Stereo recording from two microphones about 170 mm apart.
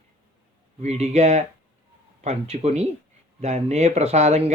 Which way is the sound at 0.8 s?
40° right (ahead or behind).